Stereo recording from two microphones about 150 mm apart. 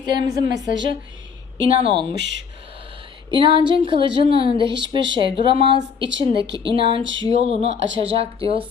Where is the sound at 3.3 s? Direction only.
35° right (ahead or behind).